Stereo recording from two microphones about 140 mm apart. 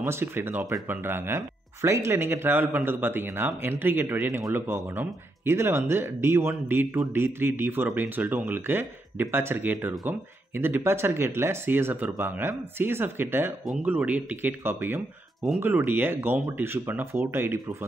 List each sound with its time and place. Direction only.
0.0 s speech: 15° right (ahead or behind)